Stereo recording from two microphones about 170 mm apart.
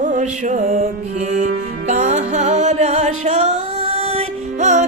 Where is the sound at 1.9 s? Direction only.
45° right (ahead or behind).